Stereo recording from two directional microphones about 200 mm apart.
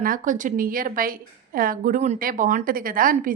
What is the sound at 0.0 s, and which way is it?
A woman's voice, 40° right (ahead or behind).